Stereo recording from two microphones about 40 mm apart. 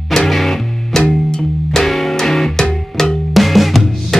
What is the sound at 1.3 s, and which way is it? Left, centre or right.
Music, centre.